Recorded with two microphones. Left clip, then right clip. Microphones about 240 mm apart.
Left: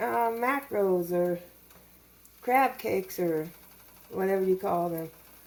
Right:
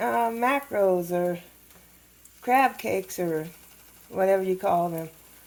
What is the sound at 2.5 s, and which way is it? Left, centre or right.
Speech, right.